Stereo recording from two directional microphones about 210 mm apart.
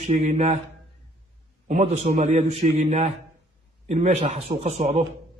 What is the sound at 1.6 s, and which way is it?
A man's voice, 30° right (ahead or behind).